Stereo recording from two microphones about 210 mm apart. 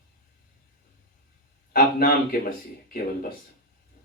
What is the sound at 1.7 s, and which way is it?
Speech, 45° left (ahead or behind).